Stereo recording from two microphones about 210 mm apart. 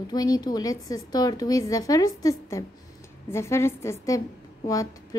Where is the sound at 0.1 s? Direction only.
20° left (ahead or behind).